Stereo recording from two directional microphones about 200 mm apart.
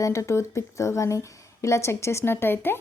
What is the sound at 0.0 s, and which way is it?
Speech, 15° left (ahead or behind).